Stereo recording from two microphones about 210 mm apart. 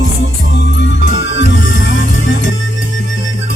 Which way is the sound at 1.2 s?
60° left (ahead or behind).